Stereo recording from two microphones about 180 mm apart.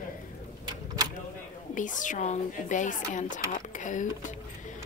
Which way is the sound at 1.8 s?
45° left (ahead or behind).